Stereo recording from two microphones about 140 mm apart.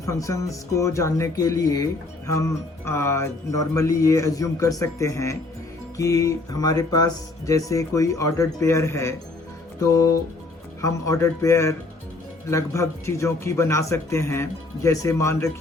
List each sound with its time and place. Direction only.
0.0 s speech: 25° left (ahead or behind)